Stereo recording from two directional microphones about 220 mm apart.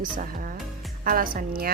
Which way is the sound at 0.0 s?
40° right (ahead or behind).